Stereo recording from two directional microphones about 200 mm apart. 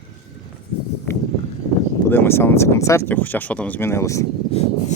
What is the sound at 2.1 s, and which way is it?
Speech, 10° left (ahead or behind).